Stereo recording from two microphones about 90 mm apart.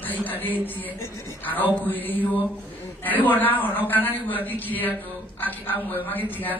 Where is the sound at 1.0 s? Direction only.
35° left (ahead or behind).